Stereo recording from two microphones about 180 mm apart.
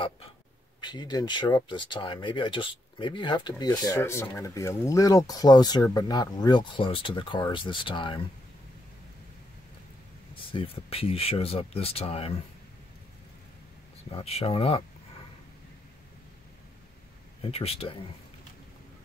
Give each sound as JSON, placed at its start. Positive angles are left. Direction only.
{"t": 0.7, "sound": "speech", "side_deg": 25}
{"t": 10.5, "sound": "speech", "side_deg": 30}
{"t": 14.1, "sound": "speech", "side_deg": 35}
{"t": 17.4, "sound": "speech", "side_deg": 30}